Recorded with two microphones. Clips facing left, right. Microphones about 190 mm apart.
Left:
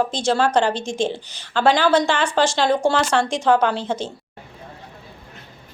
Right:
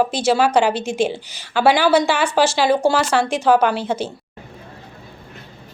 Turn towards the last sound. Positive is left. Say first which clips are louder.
# right 2 dB
turn(degrees=-5)  # may be behind; listen again after turning